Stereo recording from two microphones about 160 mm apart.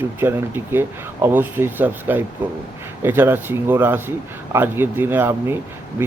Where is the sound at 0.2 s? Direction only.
15° right (ahead or behind).